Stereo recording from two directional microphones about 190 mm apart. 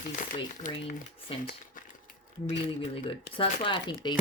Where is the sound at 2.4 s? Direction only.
30° left (ahead or behind).